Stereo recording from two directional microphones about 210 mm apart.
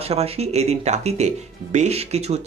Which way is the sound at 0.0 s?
30° right (ahead or behind).